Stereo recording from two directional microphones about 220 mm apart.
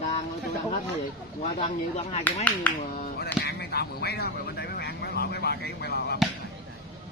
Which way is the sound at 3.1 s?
45° left (ahead or behind).